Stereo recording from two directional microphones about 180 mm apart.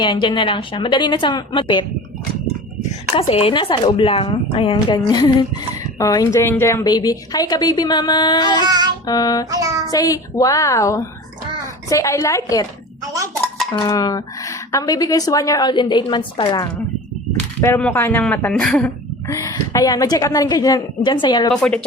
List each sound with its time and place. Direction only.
0.0 s speech: 25° left (ahead or behind)
3.2 s speech: 30° left (ahead or behind)
8.6 s child singing: 25° right (ahead or behind)
9.0 s speech: 20° left (ahead or behind)
9.5 s child singing: 20° right (ahead or behind)
9.9 s speech: 20° left (ahead or behind)
13.7 s speech: 20° left (ahead or behind)
17.6 s speech: 10° left (ahead or behind)
19.3 s speech: 20° left (ahead or behind)
21.5 s speech: 5° left (ahead or behind)